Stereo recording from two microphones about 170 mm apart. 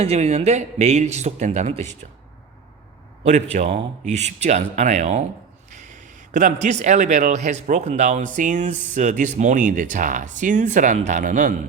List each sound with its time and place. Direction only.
0.0 s speech: 35° right (ahead or behind)
3.2 s speech: 45° right (ahead or behind)